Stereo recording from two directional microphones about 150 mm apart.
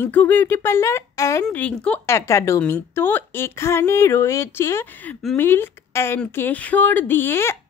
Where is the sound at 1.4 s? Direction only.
10° left (ahead or behind).